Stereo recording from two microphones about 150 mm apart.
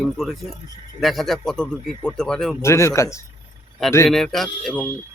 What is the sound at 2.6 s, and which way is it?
Speech, 20° left (ahead or behind).